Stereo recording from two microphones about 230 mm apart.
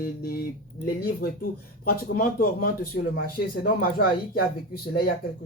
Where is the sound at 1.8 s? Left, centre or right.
Left.